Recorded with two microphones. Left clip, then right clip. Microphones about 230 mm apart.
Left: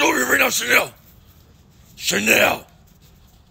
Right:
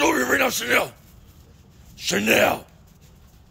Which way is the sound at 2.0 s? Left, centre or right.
Centre.